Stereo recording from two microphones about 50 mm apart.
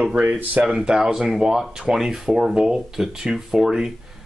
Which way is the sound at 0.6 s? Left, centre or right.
Centre.